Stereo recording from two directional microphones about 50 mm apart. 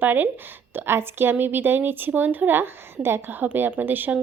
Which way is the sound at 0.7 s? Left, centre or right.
Right.